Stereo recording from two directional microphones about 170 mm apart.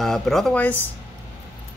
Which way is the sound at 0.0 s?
Centre (ahead or behind).